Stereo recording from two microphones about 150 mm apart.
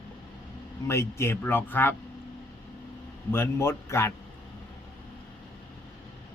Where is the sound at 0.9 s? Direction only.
20° left (ahead or behind).